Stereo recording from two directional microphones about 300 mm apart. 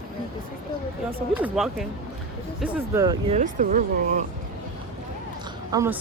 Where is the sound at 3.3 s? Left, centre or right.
Right.